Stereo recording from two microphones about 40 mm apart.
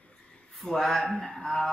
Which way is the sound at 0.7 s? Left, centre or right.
Centre.